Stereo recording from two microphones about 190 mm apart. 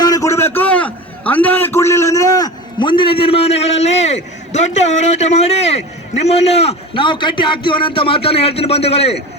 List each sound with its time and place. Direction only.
0.0 s a man's voice: 15° left (ahead or behind)